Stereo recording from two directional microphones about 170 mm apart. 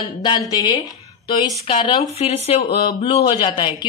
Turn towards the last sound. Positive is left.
turn(degrees=25)  # may be behind; listen again after turning